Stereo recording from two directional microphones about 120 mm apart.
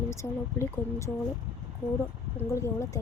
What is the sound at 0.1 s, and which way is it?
Speech, 25° left (ahead or behind).